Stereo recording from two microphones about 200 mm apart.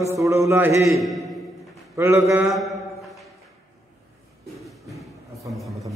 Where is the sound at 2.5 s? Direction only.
Centre (ahead or behind).